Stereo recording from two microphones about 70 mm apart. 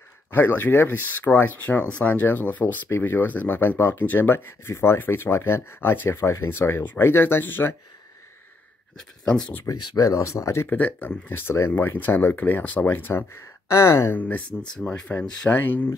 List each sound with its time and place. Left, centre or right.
0.3 s speech: left
9.7 s speech: left
10.7 s speech: left
14.1 s speech: left
14.6 s speech: centre